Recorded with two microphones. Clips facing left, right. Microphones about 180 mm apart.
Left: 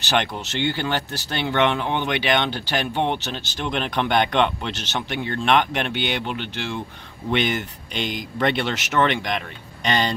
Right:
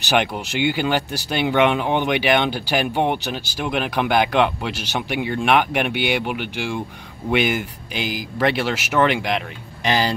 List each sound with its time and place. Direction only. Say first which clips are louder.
0.1 s speech: right 3 dB; 10° right (ahead or behind)